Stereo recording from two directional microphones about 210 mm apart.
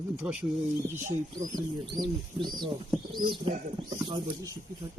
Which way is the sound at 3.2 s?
25° right (ahead or behind).